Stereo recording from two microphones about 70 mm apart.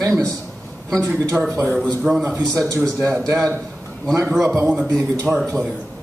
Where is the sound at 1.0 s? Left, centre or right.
Right.